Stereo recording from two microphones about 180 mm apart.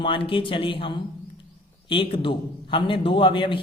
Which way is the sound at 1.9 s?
30° left (ahead or behind).